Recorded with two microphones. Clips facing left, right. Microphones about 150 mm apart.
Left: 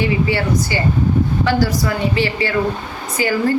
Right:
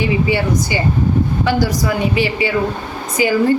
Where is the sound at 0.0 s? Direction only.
15° right (ahead or behind).